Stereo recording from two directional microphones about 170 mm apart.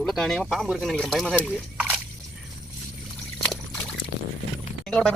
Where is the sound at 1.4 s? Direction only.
10° right (ahead or behind).